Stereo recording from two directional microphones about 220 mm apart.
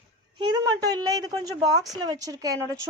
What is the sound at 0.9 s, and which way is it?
Speech, 15° right (ahead or behind).